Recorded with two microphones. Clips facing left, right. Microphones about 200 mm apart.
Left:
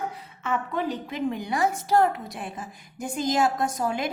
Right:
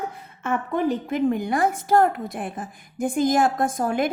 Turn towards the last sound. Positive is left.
turn(degrees=-50)  # may be behind; listen again after turning